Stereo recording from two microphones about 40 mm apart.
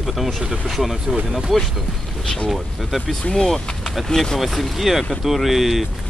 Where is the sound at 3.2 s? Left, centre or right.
Centre.